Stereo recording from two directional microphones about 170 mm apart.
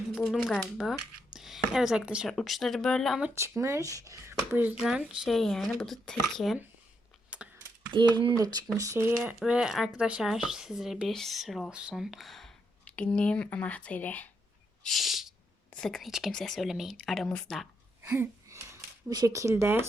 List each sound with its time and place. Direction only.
0.1 s speech: centre (ahead or behind)
7.3 s computer keyboard: 5° right (ahead or behind)
7.9 s speech: 30° right (ahead or behind)
9.2 s speech: 5° right (ahead or behind)
14.8 s a sound: centre (ahead or behind)
15.7 s speech: 5° left (ahead or behind)
18.1 s speech: 15° right (ahead or behind)